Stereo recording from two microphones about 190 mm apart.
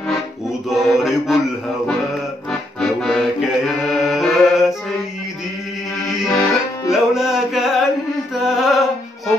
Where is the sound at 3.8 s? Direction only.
Centre (ahead or behind).